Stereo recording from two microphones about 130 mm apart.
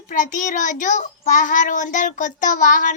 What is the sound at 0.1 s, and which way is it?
A child's voice, 75° left (ahead or behind).